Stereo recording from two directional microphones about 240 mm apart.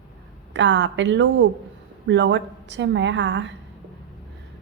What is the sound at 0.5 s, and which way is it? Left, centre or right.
A woman's voice, right.